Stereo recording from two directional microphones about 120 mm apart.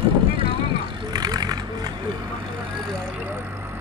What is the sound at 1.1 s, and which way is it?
Vehicle, 35° right (ahead or behind).